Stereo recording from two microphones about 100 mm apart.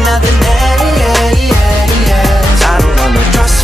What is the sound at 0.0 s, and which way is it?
Music, centre (ahead or behind).